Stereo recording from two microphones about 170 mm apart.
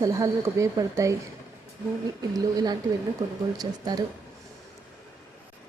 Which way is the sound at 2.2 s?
20° right (ahead or behind).